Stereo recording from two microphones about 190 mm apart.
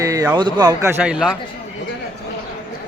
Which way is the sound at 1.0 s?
5° right (ahead or behind).